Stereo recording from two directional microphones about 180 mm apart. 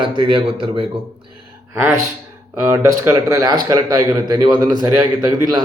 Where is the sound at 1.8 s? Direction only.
15° right (ahead or behind).